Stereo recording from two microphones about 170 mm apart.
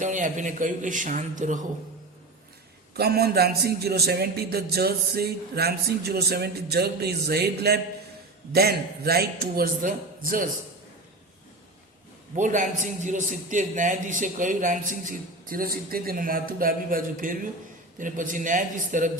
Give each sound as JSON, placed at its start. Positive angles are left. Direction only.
{"t": 0.0, "sound": "a man's voice", "side_deg": -45}
{"t": 2.9, "sound": "a man's voice", "side_deg": -65}
{"t": 12.4, "sound": "a man's voice", "side_deg": -50}